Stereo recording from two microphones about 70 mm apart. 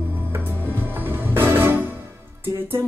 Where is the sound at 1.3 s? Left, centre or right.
Right.